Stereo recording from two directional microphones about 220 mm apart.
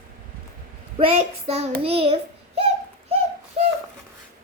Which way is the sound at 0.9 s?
25° right (ahead or behind).